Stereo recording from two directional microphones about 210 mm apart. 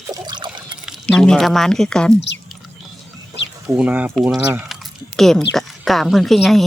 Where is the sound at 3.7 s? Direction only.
5° right (ahead or behind).